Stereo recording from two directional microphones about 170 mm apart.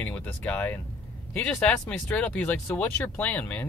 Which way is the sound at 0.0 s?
10° left (ahead or behind).